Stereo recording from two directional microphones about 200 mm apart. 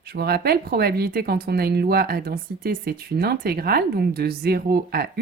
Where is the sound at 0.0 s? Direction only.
50° right (ahead or behind).